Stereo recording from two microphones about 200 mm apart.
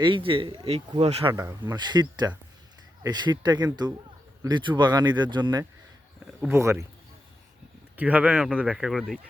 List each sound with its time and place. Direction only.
0.0 s speech: 25° right (ahead or behind)
7.9 s speech: 10° right (ahead or behind)